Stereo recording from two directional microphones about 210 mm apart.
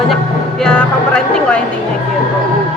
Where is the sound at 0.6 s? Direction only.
5° left (ahead or behind).